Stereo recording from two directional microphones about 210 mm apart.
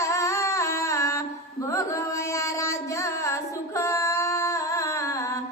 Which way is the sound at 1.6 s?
15° left (ahead or behind).